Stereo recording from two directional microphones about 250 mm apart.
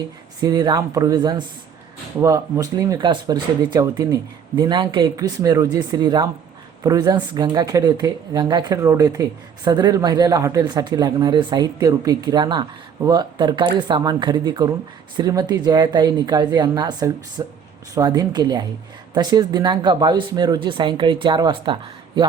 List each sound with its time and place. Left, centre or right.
0.4 s speech: centre